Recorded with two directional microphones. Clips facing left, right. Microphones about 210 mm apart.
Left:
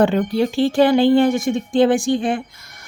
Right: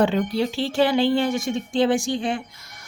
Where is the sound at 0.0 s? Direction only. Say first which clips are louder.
Left 4 dB; 50° left (ahead or behind).